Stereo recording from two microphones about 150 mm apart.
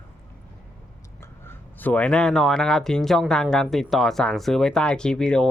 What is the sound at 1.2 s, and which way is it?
Speech, 15° left (ahead or behind).